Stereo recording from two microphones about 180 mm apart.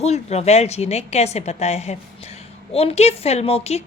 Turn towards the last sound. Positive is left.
turn(degrees=35)  # may be behind; listen again after turning